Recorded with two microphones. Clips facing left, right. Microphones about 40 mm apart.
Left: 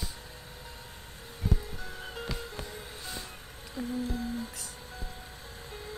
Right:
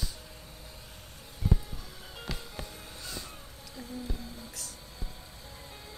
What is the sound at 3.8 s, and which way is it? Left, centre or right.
Music, left.